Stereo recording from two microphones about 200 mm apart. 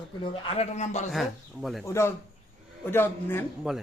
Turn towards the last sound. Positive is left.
turn(degrees=-5)  # may be behind; listen again after turning